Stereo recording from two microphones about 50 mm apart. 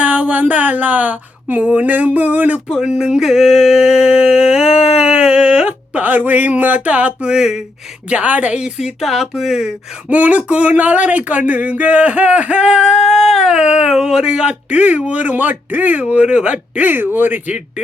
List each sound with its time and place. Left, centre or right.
0.0 s a sound: right
2.8 s a sound: centre
7.3 s speech: centre
8.1 s speech: right
8.8 s speech: centre
10.1 s speech: right
12.6 s speech: centre
13.1 s speech: centre
14.4 s speech: right
16.9 s speech: right